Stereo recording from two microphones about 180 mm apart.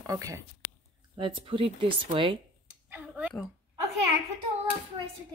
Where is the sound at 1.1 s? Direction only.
30° right (ahead or behind).